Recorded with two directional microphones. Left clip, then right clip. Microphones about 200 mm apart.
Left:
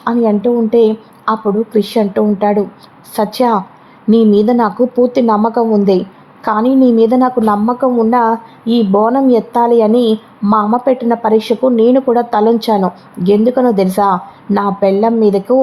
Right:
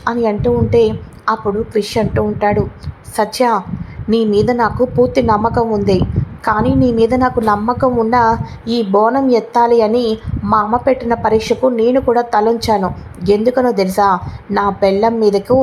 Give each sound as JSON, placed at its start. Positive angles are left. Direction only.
{"t": 0.0, "sound": "a woman's voice", "side_deg": 15}